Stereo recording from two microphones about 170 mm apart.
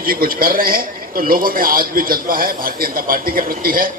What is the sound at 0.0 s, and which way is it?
A man's voice, 60° right (ahead or behind).